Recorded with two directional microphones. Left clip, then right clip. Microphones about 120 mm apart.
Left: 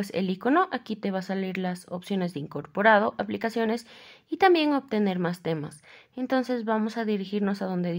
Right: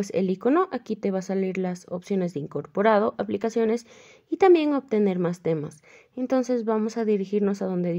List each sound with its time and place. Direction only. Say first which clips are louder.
0.0 s speech: right 4 dB; 40° right (ahead or behind)